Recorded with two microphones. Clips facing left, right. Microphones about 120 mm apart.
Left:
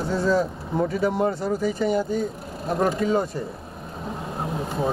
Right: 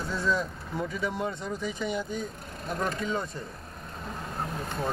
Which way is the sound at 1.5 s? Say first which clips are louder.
Left 9 dB; 5° left (ahead or behind).